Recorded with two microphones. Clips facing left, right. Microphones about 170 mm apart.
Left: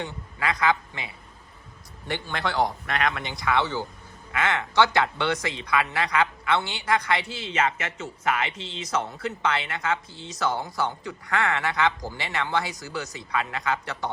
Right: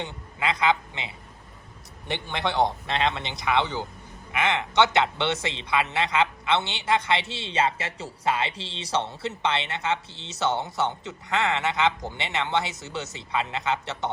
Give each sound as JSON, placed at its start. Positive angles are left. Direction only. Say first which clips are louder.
{"t": 0.0, "sound": "a man's voice", "louder": "even", "side_deg": -20}